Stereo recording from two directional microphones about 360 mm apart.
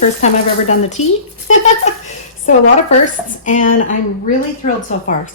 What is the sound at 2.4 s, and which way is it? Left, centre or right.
A woman's voice, left.